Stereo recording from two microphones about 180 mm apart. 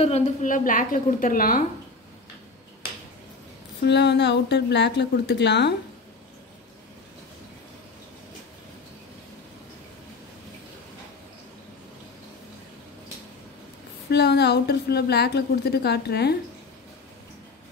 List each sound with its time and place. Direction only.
0.0 s a woman's voice: 40° left (ahead or behind)
3.8 s a woman's voice: 70° left (ahead or behind)
14.1 s a woman's voice: 65° left (ahead or behind)